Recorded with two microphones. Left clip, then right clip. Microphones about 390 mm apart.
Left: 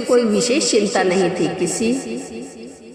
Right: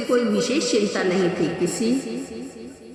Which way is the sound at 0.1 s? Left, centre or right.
Centre.